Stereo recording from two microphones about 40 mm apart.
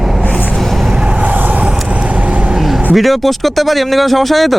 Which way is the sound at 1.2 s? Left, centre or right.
Right.